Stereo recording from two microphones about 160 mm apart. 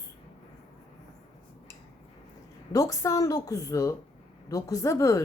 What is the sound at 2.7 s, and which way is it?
A woman's voice, 20° left (ahead or behind).